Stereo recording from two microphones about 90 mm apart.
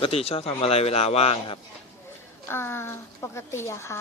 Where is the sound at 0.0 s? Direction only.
90° left.